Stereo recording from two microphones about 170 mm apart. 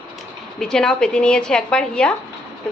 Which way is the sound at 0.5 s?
5° left (ahead or behind).